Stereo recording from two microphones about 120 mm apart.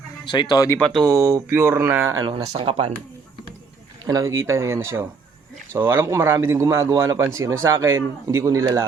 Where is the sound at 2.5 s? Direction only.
45° right (ahead or behind).